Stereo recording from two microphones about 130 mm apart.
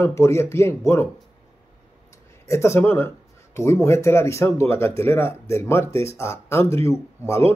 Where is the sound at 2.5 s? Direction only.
20° left (ahead or behind).